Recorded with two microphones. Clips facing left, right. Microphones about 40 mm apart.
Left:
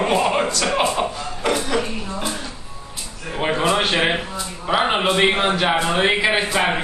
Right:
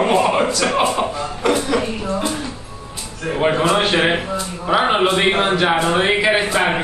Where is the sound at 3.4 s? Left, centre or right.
Centre.